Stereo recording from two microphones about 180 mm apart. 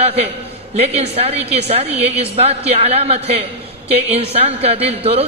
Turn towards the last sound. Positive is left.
turn(degrees=-35)  # may be behind; listen again after turning